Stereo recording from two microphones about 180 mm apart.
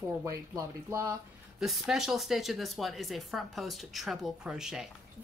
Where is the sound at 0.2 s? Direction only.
15° right (ahead or behind).